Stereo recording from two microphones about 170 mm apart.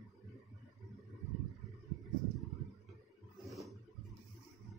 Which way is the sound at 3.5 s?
Centre (ahead or behind).